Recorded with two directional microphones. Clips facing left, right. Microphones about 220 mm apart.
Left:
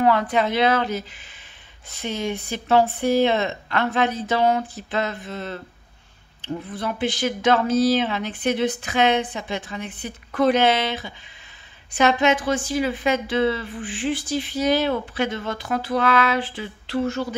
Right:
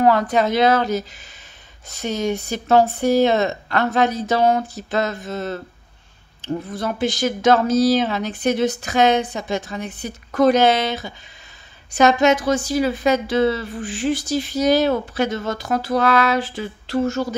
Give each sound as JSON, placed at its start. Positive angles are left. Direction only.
{"t": 0.0, "sound": "a woman's voice", "side_deg": -40}